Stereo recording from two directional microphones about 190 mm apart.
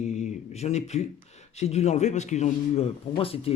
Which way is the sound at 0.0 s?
35° left (ahead or behind).